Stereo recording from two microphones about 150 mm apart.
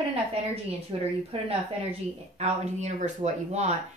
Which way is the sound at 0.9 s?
35° right (ahead or behind).